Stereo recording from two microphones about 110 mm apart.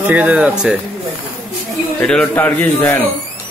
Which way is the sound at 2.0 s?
5° left (ahead or behind).